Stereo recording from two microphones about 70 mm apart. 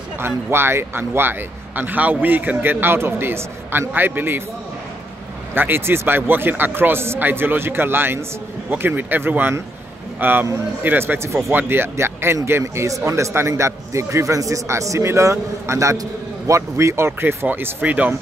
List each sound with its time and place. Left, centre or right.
0.2 s a man's voice: right
5.5 s a man's voice: right